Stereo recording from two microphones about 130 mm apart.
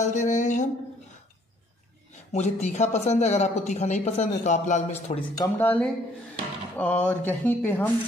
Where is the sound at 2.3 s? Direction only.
60° left (ahead or behind).